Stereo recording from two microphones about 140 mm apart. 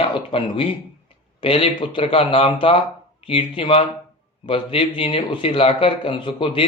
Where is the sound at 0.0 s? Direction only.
40° left (ahead or behind).